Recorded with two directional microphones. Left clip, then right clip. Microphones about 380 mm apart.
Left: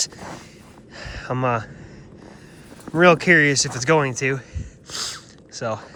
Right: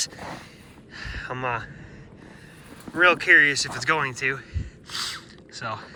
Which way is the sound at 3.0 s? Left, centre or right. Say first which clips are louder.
Left 2 dB; left.